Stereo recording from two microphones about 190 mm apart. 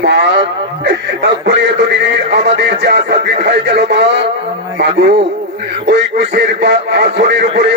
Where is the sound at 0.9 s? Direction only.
65° right (ahead or behind).